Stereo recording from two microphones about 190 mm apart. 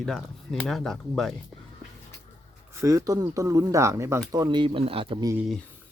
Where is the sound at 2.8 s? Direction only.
20° right (ahead or behind).